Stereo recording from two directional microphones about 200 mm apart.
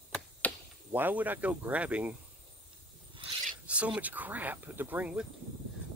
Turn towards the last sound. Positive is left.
turn(degrees=-5)  # may be behind; listen again after turning